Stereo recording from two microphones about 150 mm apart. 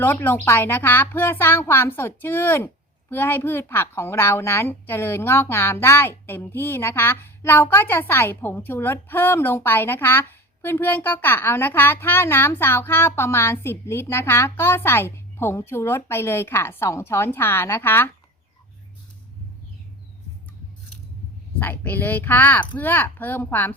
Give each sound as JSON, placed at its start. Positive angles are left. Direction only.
{"t": 0.0, "sound": "speech", "side_deg": 15}
{"t": 21.6, "sound": "speech", "side_deg": 10}